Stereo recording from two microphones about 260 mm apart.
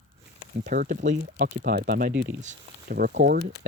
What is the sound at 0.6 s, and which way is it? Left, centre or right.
Speech, right.